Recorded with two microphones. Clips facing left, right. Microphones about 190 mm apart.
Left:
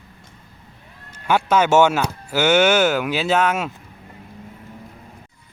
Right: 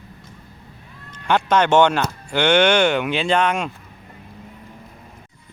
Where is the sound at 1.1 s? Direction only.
5° left (ahead or behind).